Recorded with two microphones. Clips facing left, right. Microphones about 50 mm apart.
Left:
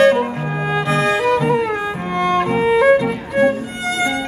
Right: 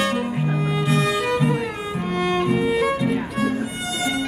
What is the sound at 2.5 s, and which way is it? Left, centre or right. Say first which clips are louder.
Music: left 5 dB; left.